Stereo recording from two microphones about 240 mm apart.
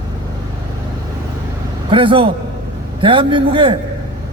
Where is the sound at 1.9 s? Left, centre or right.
Right.